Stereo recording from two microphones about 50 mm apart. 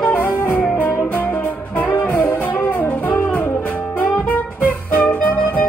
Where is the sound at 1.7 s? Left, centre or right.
Left.